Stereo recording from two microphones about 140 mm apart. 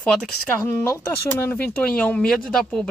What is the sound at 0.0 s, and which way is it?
Speech, 5° left (ahead or behind).